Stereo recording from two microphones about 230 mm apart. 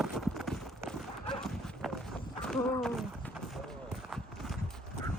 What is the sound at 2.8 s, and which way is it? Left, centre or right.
Run, centre.